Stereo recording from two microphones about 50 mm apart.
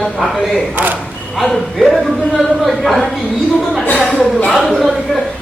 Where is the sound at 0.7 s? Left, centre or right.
Right.